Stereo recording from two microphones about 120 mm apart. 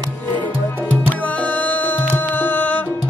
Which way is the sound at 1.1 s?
10° left (ahead or behind).